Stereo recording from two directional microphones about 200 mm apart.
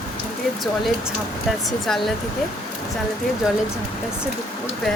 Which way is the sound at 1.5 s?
Centre (ahead or behind).